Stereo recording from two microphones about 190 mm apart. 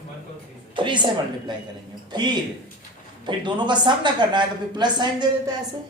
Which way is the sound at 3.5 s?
25° right (ahead or behind).